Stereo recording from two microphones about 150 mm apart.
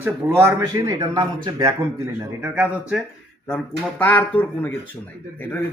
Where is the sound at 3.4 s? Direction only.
10° left (ahead or behind).